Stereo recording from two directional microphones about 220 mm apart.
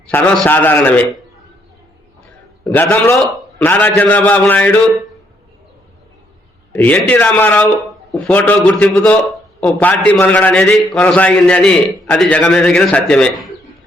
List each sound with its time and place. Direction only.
0.1 s a man's voice: 10° left (ahead or behind)
2.6 s a man's voice: 10° left (ahead or behind)
6.7 s a man's voice: 5° left (ahead or behind)